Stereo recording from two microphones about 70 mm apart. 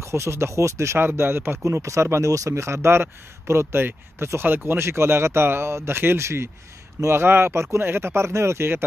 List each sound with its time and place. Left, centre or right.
0.0 s speech: right